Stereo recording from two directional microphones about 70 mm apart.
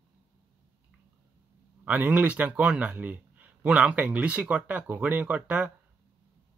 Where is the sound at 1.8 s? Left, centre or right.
Centre.